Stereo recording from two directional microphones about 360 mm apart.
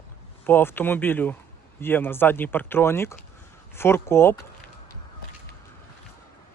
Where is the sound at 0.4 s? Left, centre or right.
Centre.